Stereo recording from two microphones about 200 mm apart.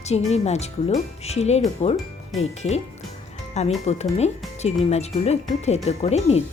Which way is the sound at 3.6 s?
35° left (ahead or behind).